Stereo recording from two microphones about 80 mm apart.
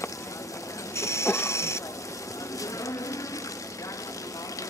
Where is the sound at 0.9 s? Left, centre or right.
Left.